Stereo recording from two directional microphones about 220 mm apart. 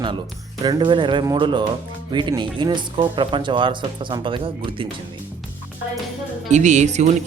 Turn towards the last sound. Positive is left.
turn(degrees=-30)  # may be behind; listen again after turning